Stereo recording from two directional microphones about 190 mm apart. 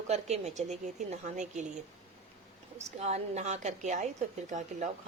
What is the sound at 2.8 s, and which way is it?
A woman's voice, 35° right (ahead or behind).